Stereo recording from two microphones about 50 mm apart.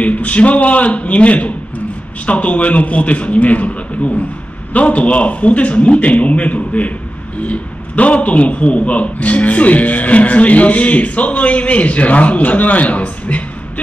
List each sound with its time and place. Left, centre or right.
0.0 s a man's voice: left